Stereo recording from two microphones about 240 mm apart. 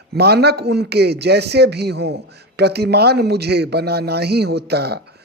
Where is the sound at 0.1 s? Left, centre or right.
Right.